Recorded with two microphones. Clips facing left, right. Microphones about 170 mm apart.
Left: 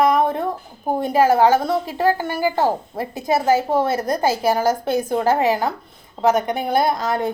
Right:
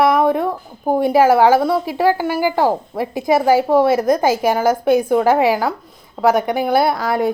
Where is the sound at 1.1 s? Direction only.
90° right.